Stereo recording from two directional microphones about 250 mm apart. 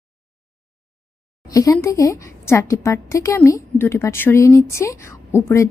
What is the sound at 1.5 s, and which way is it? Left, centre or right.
A woman's voice, centre.